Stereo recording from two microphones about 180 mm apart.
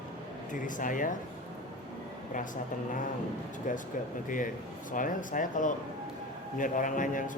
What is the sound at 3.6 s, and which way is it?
Speech, 45° left (ahead or behind).